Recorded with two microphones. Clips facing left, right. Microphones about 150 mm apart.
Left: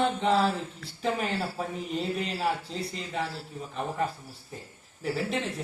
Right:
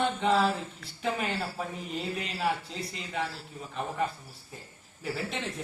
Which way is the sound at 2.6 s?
30° left (ahead or behind).